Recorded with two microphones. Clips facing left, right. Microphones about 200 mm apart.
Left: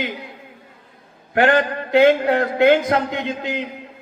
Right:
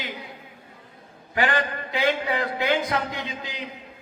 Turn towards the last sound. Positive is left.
turn(degrees=60)  # may be behind; listen again after turning